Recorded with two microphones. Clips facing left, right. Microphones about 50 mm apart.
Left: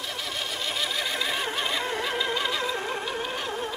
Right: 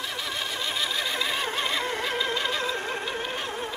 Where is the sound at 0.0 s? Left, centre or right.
Centre.